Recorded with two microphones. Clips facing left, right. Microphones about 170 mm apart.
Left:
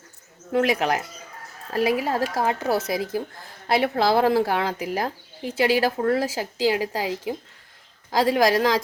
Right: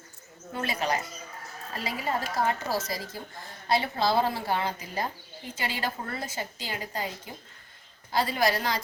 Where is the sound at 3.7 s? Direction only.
75° left (ahead or behind).